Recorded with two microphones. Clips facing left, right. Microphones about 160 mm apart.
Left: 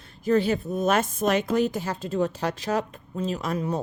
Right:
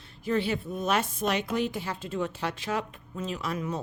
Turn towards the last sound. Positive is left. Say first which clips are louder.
# left 5 dB
turn(degrees=35)  # may be behind; listen again after turning